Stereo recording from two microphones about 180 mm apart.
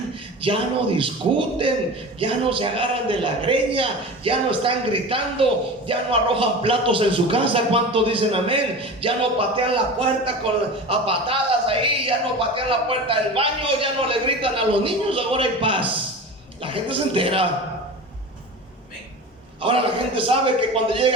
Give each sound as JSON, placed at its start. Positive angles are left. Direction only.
{"t": 0.4, "sound": "a man's voice", "side_deg": -30}
{"t": 19.6, "sound": "a man's voice", "side_deg": -30}